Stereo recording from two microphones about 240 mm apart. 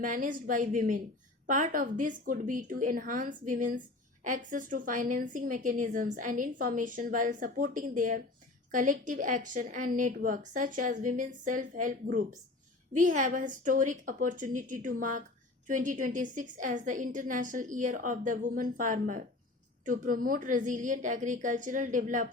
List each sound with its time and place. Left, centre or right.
0.0 s a woman's voice: right